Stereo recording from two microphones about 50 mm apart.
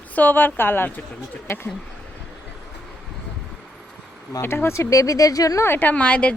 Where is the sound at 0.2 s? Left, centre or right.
Left.